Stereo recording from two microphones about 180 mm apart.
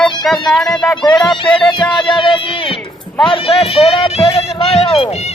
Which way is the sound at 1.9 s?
25° left (ahead or behind).